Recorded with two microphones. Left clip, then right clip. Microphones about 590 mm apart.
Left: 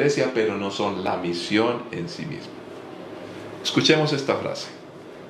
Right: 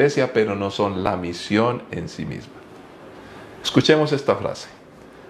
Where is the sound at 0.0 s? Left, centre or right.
Right.